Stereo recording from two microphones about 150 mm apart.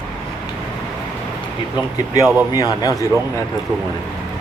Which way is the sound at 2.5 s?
25° left (ahead or behind).